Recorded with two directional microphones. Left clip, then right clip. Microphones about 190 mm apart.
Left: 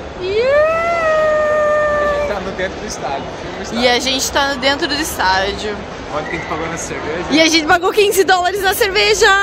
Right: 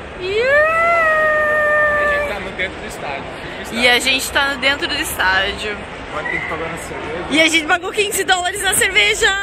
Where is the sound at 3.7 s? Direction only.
15° left (ahead or behind).